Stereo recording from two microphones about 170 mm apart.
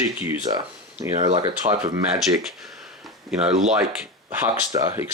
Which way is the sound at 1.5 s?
15° right (ahead or behind).